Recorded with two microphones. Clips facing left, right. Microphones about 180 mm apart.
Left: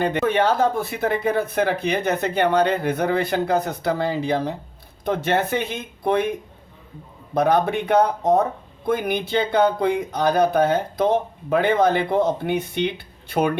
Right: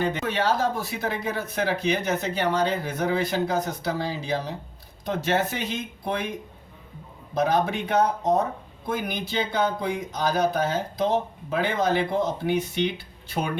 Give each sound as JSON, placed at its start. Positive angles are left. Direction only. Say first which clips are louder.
{"t": 0.0, "sound": "speech", "louder": "left 5 dB", "side_deg": 60}
{"t": 7.3, "sound": "speech", "louder": "left 4 dB", "side_deg": 60}